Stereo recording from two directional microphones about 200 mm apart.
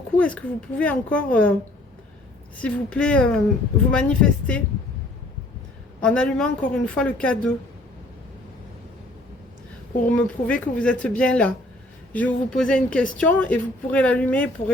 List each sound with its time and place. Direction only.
0.2 s a woman's voice: 5° left (ahead or behind)
2.6 s a woman's voice: 5° left (ahead or behind)
6.0 s a woman's voice: 5° left (ahead or behind)
10.2 s a woman's voice: 5° left (ahead or behind)